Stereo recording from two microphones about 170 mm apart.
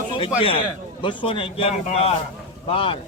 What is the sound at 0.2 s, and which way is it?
A man's voice, 35° left (ahead or behind).